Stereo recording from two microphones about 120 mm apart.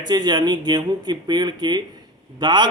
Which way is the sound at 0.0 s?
35° right (ahead or behind).